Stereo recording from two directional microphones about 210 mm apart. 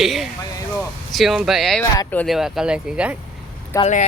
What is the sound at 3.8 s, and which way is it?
Speech, 35° left (ahead or behind).